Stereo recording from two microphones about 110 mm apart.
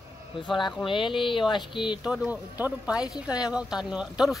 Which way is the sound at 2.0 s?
5° right (ahead or behind).